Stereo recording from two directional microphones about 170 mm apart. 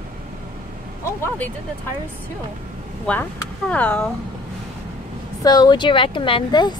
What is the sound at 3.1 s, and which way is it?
Speech, 10° left (ahead or behind).